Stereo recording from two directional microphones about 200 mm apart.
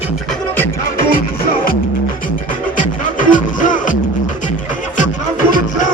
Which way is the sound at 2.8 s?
40° left (ahead or behind).